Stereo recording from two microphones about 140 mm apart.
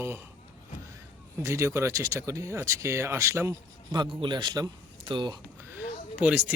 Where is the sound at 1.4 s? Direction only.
20° right (ahead or behind).